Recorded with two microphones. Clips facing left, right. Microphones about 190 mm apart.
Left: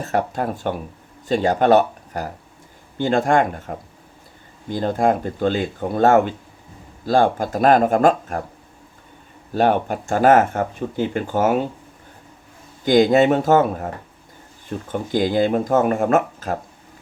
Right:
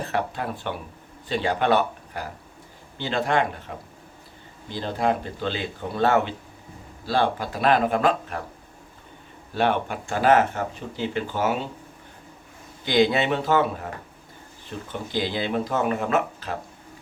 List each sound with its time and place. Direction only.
0.0 s speech: 45° left (ahead or behind)
9.6 s speech: 40° left (ahead or behind)
12.8 s speech: 45° left (ahead or behind)
14.9 s speech: 45° left (ahead or behind)